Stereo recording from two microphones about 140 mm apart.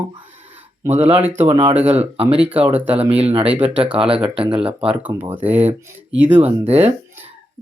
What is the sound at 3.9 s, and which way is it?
Speech, 40° right (ahead or behind).